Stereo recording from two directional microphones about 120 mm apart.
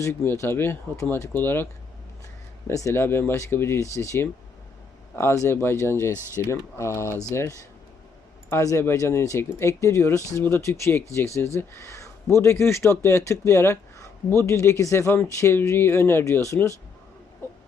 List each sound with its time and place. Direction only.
0.0 s speech: 20° left (ahead or behind)
2.6 s speech: 25° left (ahead or behind)